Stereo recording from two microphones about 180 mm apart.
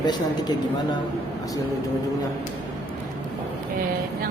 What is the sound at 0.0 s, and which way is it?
Speech, 25° left (ahead or behind).